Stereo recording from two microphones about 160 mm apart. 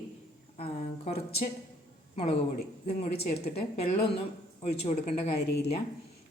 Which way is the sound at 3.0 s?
40° left (ahead or behind).